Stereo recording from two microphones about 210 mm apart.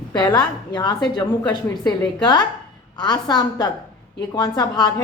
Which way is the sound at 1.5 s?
5° left (ahead or behind).